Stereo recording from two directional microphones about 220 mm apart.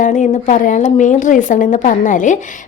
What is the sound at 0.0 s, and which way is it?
A woman's voice, 35° left (ahead or behind).